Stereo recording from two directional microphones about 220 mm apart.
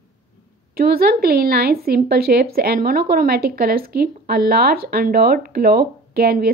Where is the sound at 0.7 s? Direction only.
45° right (ahead or behind).